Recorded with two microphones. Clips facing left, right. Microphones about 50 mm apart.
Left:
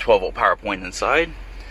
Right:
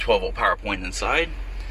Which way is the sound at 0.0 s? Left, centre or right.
Left.